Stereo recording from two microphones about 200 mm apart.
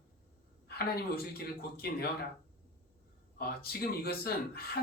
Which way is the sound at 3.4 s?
50° left (ahead or behind).